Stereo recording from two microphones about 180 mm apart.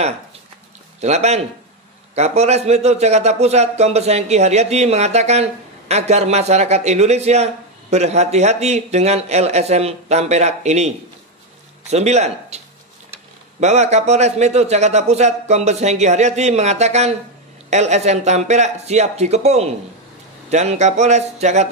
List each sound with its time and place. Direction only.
1.0 s a man's voice: 40° right (ahead or behind)
11.9 s a man's voice: 40° right (ahead or behind)